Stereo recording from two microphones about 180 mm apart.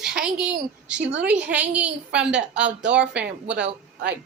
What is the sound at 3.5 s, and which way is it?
Speech, 75° right (ahead or behind).